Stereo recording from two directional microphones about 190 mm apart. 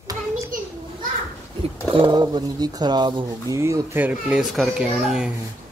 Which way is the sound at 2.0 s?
25° right (ahead or behind).